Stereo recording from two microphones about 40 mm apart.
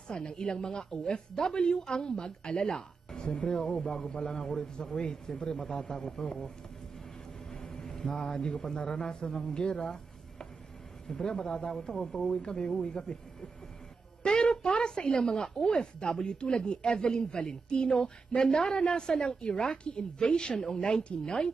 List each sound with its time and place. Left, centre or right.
0.1 s a woman's voice: left
3.3 s a woman's voice: left
7.5 s a man's voice: centre
11.1 s a woman's voice: left
14.2 s a woman's voice: centre